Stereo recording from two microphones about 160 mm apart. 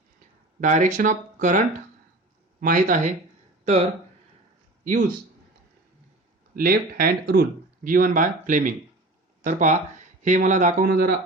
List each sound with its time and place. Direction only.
0.6 s speech: 50° right (ahead or behind)
4.8 s speech: 55° right (ahead or behind)
6.6 s speech: 65° right (ahead or behind)
7.9 s speech: 60° right (ahead or behind)